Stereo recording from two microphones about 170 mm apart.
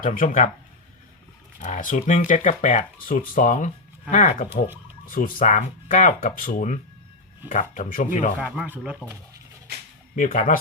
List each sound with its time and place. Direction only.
0.0 s speech: 55° left (ahead or behind)
1.6 s speech: 50° left (ahead or behind)
8.4 s speech: 10° right (ahead or behind)
10.2 s speech: 50° left (ahead or behind)